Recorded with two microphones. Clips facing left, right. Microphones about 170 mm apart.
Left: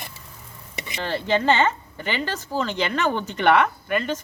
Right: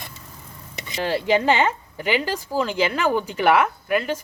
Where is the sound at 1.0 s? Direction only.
10° right (ahead or behind).